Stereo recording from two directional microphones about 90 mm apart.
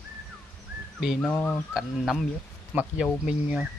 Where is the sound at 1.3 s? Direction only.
25° left (ahead or behind).